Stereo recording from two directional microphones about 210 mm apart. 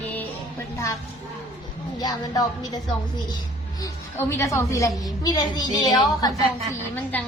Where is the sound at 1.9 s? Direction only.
20° left (ahead or behind).